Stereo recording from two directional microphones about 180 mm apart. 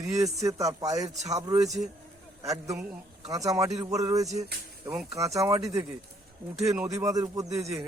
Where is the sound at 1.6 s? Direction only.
Centre (ahead or behind).